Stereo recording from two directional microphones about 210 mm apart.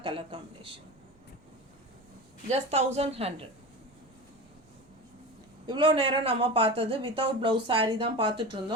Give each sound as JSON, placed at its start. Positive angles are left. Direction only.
{"t": 0.0, "sound": "a woman's voice", "side_deg": -25}
{"t": 2.5, "sound": "a woman's voice", "side_deg": -30}
{"t": 5.6, "sound": "speech", "side_deg": -20}